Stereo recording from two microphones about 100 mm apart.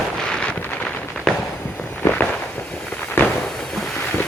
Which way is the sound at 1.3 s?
5° left (ahead or behind).